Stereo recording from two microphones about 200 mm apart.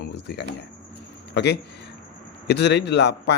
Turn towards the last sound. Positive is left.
turn(degrees=60)  # may be behind; listen again after turning